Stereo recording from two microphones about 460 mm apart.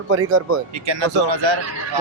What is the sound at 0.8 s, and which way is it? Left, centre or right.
Speech, right.